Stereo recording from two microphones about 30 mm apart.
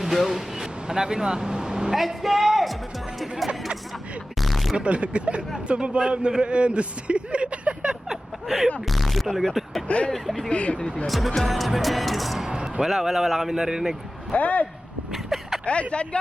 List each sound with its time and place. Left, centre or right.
0.0 s a sound: centre
0.9 s speech: right
2.0 s music: centre
4.4 s a sound: centre
4.8 s a sound: right
5.6 s speech: right
8.4 s a man's voice: centre
9.9 s speech: left
11.0 s music: centre
12.8 s a man's voice: centre
13.5 s a man's voice: right
14.3 s speech: left
15.1 s vehicle: centre
15.6 s speech: left